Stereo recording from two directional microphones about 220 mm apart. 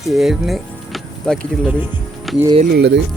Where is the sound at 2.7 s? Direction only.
50° right (ahead or behind).